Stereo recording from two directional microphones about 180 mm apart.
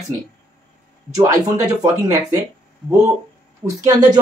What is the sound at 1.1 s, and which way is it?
Speech, 20° right (ahead or behind).